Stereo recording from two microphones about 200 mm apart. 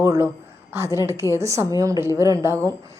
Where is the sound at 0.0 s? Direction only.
15° right (ahead or behind).